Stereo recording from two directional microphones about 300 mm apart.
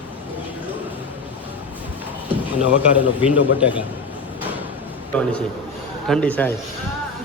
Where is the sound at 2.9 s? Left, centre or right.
Centre.